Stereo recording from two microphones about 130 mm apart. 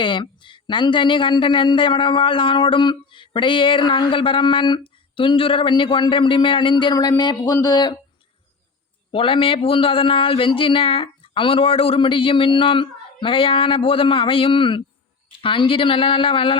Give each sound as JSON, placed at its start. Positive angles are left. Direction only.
{"t": 0.0, "sound": "speech", "side_deg": 40}
{"t": 9.1, "sound": "speech", "side_deg": 45}